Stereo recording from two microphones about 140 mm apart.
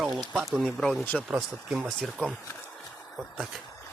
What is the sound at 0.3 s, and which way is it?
Speech, 5° right (ahead or behind).